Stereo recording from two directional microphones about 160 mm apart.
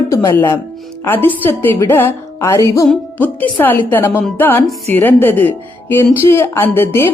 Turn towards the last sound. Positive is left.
turn(degrees=15)  # may be behind; listen again after turning